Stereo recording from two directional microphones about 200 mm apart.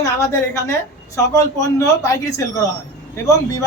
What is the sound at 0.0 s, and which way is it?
A woman's voice, 15° left (ahead or behind).